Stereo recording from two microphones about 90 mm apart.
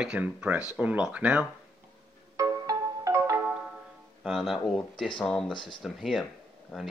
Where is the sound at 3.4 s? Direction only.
10° right (ahead or behind).